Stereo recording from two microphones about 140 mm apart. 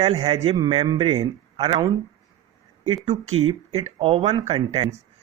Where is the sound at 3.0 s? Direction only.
45° right (ahead or behind).